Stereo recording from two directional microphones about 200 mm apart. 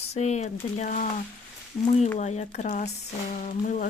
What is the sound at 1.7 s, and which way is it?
Speech, 15° left (ahead or behind).